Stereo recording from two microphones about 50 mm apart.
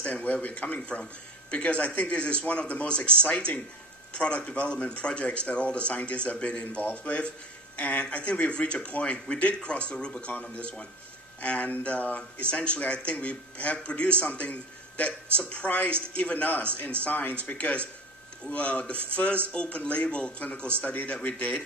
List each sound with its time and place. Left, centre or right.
0.2 s a man's voice: left